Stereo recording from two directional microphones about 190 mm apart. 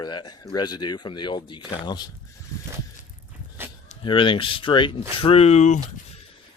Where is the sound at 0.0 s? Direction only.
20° left (ahead or behind).